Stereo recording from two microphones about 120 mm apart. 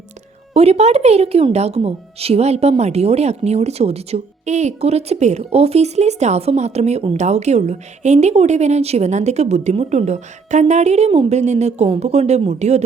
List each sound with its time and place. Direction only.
0.5 s speech: 60° right (ahead or behind)